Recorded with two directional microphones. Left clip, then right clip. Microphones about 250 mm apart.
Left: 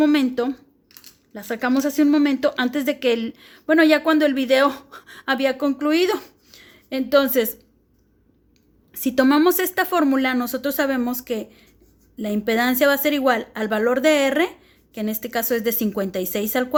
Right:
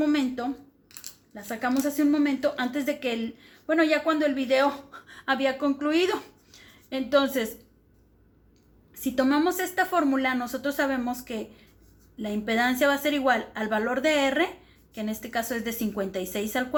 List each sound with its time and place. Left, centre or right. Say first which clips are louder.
0.0 s speech: left 7 dB; left
8.9 s speech: left 7 dB; left